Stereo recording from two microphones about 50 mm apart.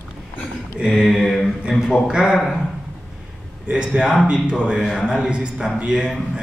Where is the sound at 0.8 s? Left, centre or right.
Centre.